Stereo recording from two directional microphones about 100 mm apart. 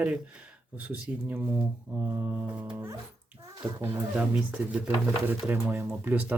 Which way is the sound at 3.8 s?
15° right (ahead or behind).